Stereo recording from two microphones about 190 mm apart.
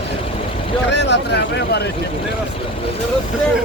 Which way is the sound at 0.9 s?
65° left (ahead or behind).